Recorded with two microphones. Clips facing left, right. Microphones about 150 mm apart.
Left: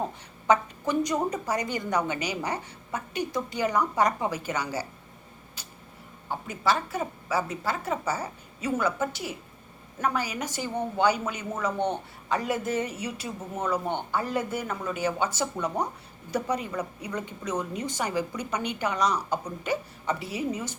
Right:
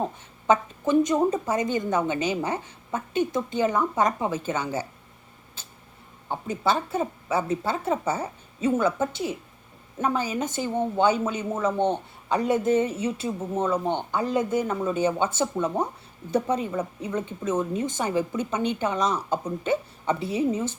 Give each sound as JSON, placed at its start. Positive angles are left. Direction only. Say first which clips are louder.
{"t": 0.4, "sound": "speech", "louder": "right 2 dB", "side_deg": -20}
{"t": 6.2, "sound": "speech", "louder": "right 2 dB", "side_deg": -25}